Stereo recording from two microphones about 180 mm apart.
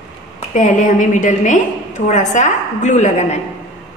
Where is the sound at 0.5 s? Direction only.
45° left (ahead or behind).